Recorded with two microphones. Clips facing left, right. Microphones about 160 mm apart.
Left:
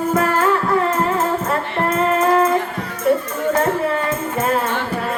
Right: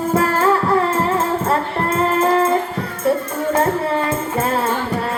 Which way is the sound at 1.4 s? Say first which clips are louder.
Right 1 dB; 30° right (ahead or behind).